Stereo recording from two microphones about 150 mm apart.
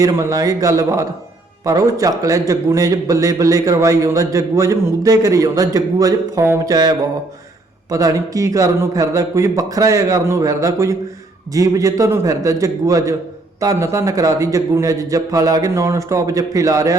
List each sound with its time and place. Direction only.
0.0 s a man's voice: 20° right (ahead or behind)